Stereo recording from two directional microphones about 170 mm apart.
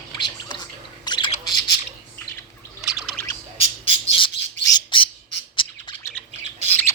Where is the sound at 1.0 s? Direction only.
25° left (ahead or behind).